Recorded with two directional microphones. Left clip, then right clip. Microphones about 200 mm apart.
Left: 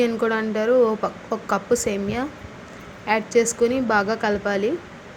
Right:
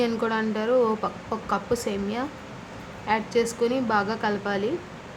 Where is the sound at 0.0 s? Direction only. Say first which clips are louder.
Left 4 dB; 15° left (ahead or behind).